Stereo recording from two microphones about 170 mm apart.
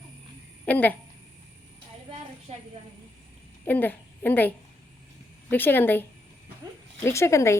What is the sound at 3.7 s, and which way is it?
A woman's voice, 10° left (ahead or behind).